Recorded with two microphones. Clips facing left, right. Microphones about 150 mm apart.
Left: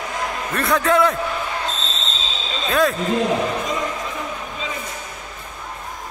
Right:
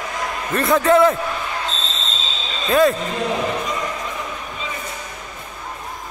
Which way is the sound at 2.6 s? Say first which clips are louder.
Right 4 dB; centre (ahead or behind).